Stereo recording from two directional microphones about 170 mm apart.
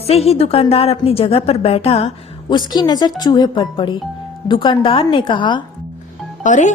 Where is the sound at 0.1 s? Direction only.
35° left (ahead or behind).